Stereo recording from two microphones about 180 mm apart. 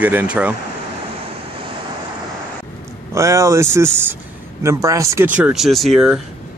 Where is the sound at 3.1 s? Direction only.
15° right (ahead or behind); by 6.2 s centre (ahead or behind).